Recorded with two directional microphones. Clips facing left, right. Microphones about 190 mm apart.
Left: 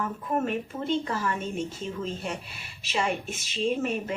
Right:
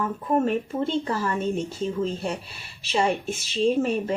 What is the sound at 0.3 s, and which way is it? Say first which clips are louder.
Speech: right 6 dB; 30° right (ahead or behind).